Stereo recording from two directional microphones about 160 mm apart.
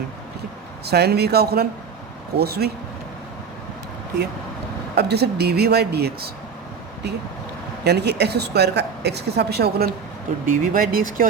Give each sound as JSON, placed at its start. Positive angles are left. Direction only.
{"t": 0.9, "sound": "speech", "side_deg": -90}
{"t": 4.9, "sound": "speech", "side_deg": -90}
{"t": 7.9, "sound": "a woman's voice", "side_deg": -90}
{"t": 10.4, "sound": "speech", "side_deg": -60}